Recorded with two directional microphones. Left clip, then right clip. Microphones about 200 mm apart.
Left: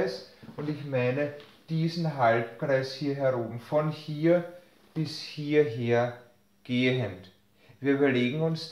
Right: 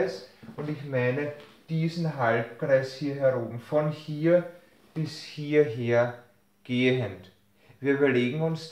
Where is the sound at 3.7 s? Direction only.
25° left (ahead or behind).